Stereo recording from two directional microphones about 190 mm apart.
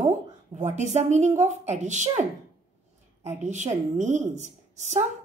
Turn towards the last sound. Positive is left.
turn(degrees=-40)  # may be behind; listen again after turning